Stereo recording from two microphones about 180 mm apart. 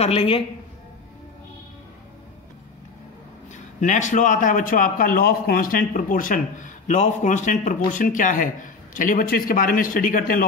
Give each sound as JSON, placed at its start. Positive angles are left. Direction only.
{"t": 0.0, "sound": "a woman's voice", "side_deg": 35}
{"t": 3.8, "sound": "a man's voice", "side_deg": 45}